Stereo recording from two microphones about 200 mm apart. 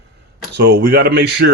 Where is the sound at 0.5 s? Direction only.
55° right (ahead or behind).